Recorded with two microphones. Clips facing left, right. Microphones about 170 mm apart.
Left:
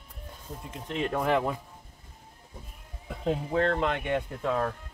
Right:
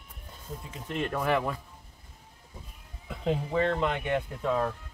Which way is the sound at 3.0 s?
5° right (ahead or behind).